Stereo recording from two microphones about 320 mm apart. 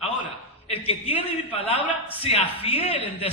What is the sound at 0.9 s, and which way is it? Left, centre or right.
Speech, centre.